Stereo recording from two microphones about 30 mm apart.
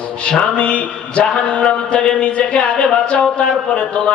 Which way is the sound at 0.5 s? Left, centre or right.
Left.